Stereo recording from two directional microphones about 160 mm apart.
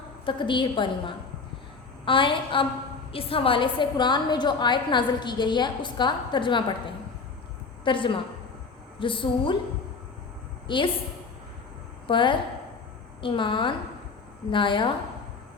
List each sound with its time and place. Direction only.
0.3 s a woman's voice: 30° left (ahead or behind)
7.9 s a woman's voice: 30° left (ahead or behind)
10.7 s a woman's voice: 30° left (ahead or behind)
12.0 s a woman's voice: 30° left (ahead or behind)